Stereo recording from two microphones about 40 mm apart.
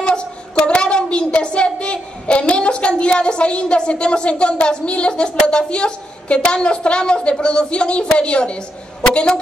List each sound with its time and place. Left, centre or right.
0.7 s a woman's voice: left